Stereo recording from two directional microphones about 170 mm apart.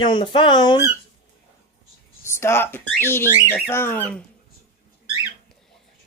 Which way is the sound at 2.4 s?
15° left (ahead or behind).